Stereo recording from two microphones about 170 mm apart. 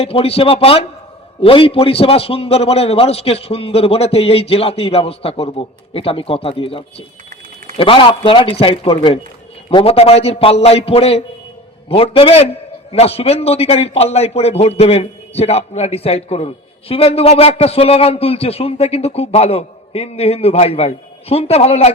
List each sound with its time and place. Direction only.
0.0 s a man's voice: 35° left (ahead or behind)